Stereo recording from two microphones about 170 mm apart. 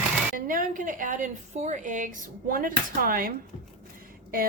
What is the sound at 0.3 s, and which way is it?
A woman's voice, 55° right (ahead or behind).